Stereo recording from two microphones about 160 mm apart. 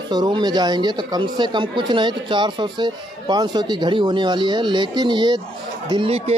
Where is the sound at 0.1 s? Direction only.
25° right (ahead or behind).